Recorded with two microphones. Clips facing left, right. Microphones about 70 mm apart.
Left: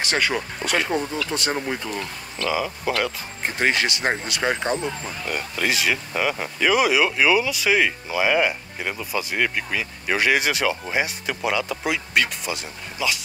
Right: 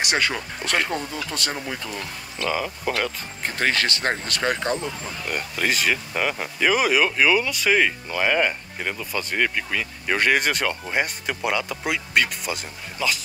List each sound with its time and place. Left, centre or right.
0.2 s speech: centre
0.7 s speech: centre
2.5 s speech: centre
3.4 s speech: centre
5.3 s speech: centre